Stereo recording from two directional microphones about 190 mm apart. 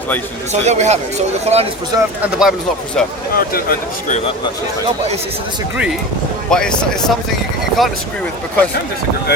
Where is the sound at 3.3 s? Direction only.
50° left (ahead or behind).